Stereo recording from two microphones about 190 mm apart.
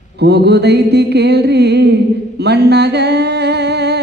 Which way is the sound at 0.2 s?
60° right (ahead or behind).